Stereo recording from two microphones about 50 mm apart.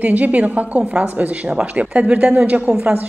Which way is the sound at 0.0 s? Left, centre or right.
Right.